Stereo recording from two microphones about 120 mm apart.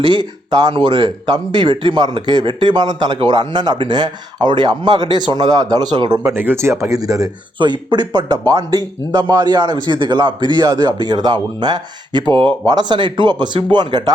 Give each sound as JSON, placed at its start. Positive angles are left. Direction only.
{"t": 0.0, "sound": "speech", "side_deg": -40}
{"t": 6.3, "sound": "speech", "side_deg": -20}
{"t": 7.6, "sound": "speech", "side_deg": -40}